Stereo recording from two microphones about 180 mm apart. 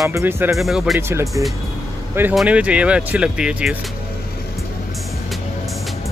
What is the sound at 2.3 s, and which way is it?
Speech, 5° right (ahead or behind).